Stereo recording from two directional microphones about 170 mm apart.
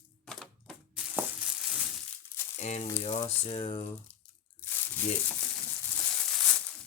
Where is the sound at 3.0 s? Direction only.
30° left (ahead or behind).